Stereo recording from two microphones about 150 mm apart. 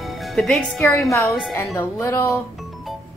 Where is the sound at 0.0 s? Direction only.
Centre (ahead or behind).